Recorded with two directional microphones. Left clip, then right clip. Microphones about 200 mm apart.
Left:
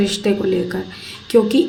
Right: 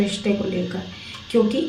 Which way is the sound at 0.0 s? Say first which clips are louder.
Left 5 dB; 45° left (ahead or behind).